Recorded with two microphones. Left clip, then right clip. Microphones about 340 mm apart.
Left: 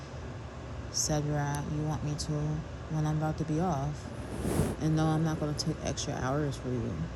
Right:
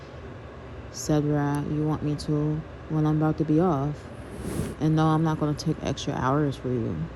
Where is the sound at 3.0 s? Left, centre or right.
Right.